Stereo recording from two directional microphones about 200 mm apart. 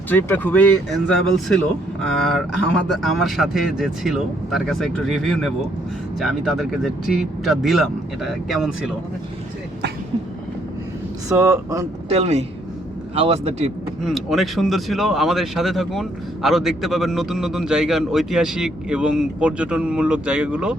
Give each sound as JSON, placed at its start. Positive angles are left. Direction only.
{"t": 0.1, "sound": "speech", "side_deg": 10}
{"t": 11.3, "sound": "speech", "side_deg": -15}
{"t": 12.0, "sound": "speech", "side_deg": -30}
{"t": 14.0, "sound": "speech", "side_deg": 0}